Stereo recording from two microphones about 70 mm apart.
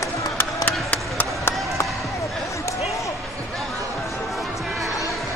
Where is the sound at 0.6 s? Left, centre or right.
Left.